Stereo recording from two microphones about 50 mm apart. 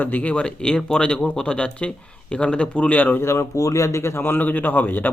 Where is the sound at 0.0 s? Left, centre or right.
Left.